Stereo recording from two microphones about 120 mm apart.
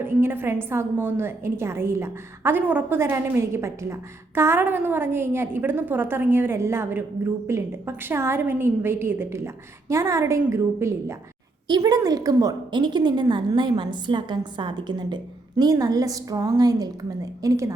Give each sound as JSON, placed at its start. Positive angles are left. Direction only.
{"t": 0.0, "sound": "a woman's voice", "side_deg": -20}